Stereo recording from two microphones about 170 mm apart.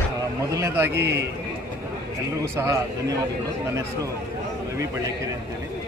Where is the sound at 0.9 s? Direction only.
75° right (ahead or behind).